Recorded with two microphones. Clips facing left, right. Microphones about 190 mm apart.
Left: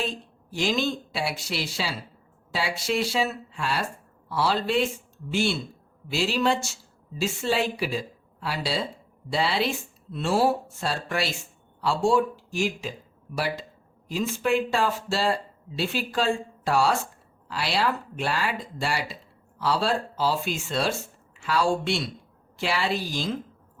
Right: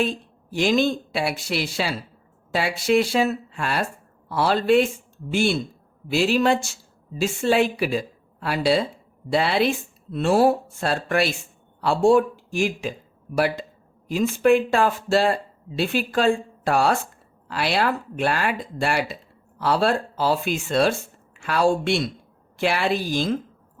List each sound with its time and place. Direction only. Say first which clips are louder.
0.5 s speech: right 6 dB; 55° right (ahead or behind)